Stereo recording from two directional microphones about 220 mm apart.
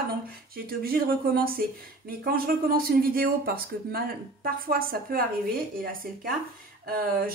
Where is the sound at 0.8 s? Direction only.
40° right (ahead or behind).